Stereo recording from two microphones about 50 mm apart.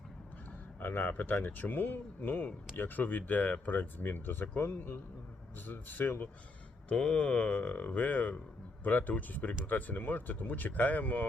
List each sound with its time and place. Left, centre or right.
0.8 s speech: left
5.6 s speech: left
6.9 s speech: centre; by 11.3 s left